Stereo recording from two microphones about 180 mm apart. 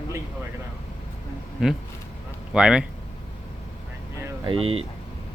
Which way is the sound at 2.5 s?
5° right (ahead or behind).